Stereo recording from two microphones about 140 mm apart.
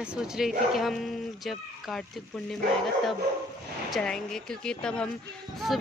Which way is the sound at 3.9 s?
5° left (ahead or behind).